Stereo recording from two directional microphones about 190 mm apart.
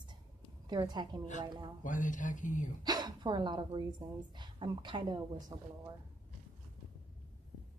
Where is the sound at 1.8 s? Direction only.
45° left (ahead or behind).